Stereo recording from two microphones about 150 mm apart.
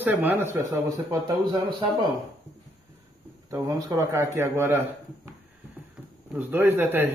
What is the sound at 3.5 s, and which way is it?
A man's voice, 20° right (ahead or behind).